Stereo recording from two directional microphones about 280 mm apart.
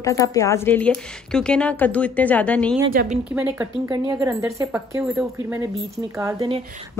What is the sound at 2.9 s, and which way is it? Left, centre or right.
Speech, right.